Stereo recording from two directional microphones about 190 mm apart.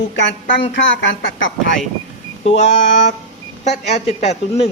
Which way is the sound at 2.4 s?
35° left (ahead or behind).